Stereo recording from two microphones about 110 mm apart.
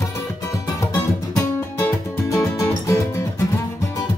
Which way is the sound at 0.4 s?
30° left (ahead or behind).